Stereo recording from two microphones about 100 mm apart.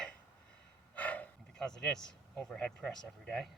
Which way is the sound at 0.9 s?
15° left (ahead or behind).